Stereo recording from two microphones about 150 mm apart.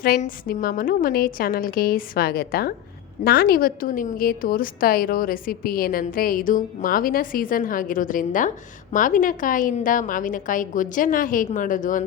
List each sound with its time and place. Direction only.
0.0 s a woman's voice: 65° left (ahead or behind)